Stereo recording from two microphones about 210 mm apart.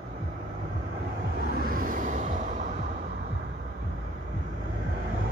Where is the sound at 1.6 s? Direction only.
40° right (ahead or behind).